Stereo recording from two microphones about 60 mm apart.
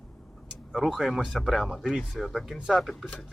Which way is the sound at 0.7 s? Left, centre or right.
Centre.